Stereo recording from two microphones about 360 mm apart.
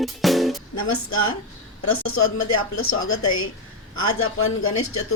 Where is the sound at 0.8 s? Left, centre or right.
Left.